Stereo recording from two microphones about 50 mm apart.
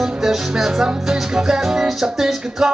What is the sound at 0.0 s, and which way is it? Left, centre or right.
Music, centre.